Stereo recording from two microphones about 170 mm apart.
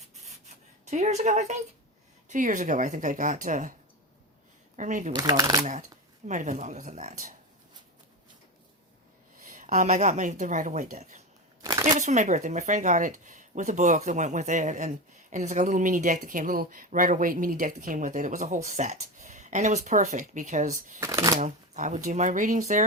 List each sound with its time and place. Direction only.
0.4 s a sound: 40° right (ahead or behind)
2.3 s a woman's voice: 50° right (ahead or behind)
4.8 s a woman's voice: 45° right (ahead or behind)
5.1 s speech: 20° right (ahead or behind)
6.2 s a woman's voice: 45° right (ahead or behind)
9.5 s a woman's voice: 50° right (ahead or behind)
11.6 s shuffling cards: 20° right (ahead or behind)
11.9 s a woman's voice: 45° right (ahead or behind)
21.0 s speech: 20° right (ahead or behind)
21.3 s a woman's voice: 45° right (ahead or behind)